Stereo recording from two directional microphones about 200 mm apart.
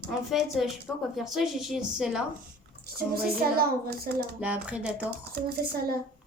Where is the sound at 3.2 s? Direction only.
50° right (ahead or behind).